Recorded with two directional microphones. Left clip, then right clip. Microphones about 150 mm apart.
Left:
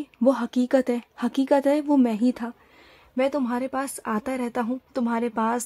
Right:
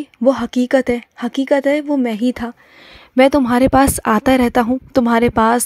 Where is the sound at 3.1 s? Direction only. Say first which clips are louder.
Right 12 dB; 50° right (ahead or behind).